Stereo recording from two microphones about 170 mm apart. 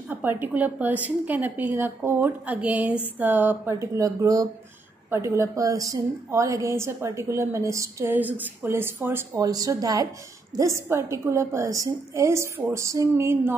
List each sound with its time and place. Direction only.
0.1 s a woman's voice: 10° right (ahead or behind)